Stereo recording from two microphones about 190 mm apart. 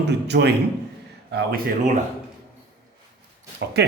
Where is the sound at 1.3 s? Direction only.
50° right (ahead or behind).